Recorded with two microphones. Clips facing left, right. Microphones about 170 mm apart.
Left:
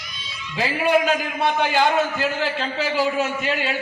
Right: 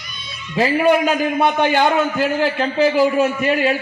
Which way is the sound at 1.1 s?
55° right (ahead or behind).